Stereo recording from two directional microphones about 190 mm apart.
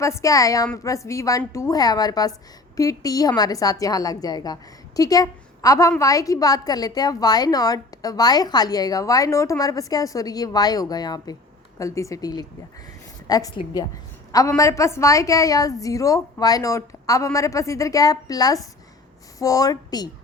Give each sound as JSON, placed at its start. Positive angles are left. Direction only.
{"t": 0.0, "sound": "a woman's voice", "side_deg": 15}